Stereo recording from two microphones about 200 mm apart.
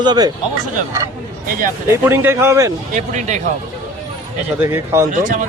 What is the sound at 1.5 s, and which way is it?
Speech, 40° right (ahead or behind).